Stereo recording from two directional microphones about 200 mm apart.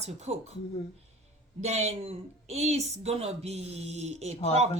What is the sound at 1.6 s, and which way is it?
A woman's voice, 35° right (ahead or behind).